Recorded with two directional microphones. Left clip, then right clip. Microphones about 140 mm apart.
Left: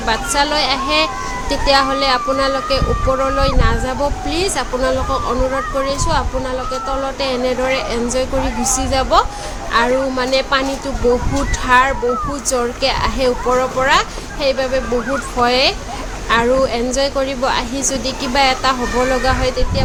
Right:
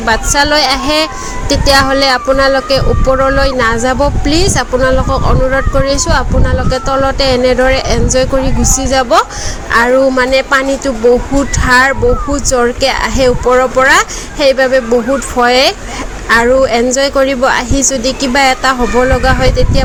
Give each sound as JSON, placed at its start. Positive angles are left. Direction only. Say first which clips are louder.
{"t": 0.0, "sound": "a child's voice", "louder": "right 6 dB", "side_deg": -40}
{"t": 9.7, "sound": "a child's voice", "louder": "right 7 dB", "side_deg": -45}